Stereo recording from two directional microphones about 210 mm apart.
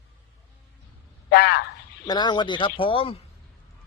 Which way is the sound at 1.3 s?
50° left (ahead or behind).